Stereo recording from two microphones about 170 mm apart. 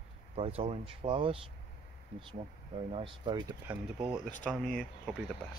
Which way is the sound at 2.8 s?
30° right (ahead or behind).